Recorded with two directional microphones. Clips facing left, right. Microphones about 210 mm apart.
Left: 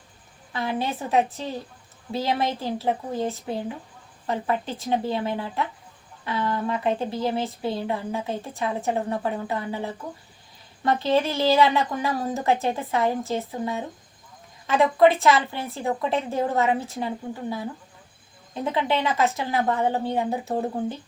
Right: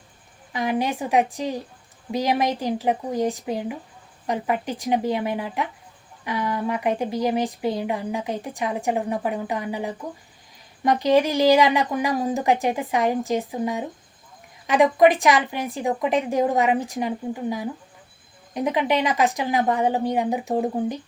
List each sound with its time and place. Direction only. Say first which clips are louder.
0.5 s speech: right 3 dB; 15° right (ahead or behind)